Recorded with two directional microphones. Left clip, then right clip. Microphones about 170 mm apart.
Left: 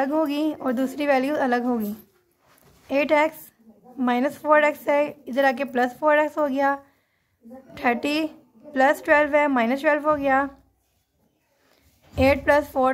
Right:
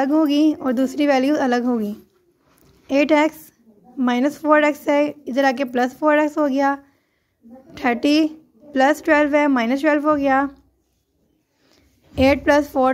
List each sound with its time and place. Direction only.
0.0 s a woman's voice: 15° right (ahead or behind)
2.9 s a woman's voice: 20° right (ahead or behind)
11.6 s a sound: 20° right (ahead or behind)